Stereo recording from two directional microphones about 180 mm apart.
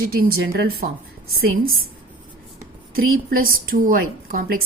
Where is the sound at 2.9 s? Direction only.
55° right (ahead or behind).